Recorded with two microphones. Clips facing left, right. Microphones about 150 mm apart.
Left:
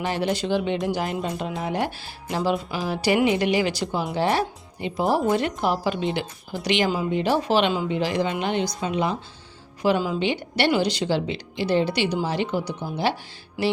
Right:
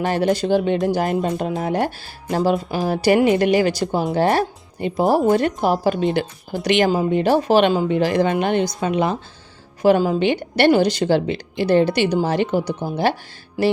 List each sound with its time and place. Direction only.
0.0 s a woman's voice: 45° right (ahead or behind)
9.8 s a woman's voice: 45° right (ahead or behind)